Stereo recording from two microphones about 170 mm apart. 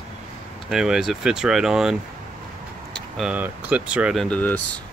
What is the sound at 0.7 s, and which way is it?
Speech, 5° right (ahead or behind).